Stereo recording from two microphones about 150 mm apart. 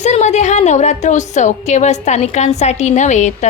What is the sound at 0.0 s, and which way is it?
A woman's voice, 50° left (ahead or behind).